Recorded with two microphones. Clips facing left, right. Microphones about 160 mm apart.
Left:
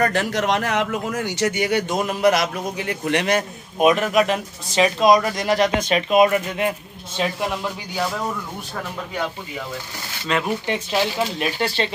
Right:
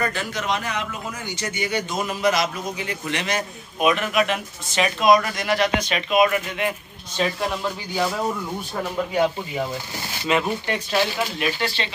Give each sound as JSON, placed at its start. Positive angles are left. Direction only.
{"t": 0.0, "sound": "a man's voice", "side_deg": 70}
{"t": 3.8, "sound": "speech", "side_deg": 40}
{"t": 10.4, "sound": "speech", "side_deg": 20}
{"t": 11.3, "sound": "speech", "side_deg": 45}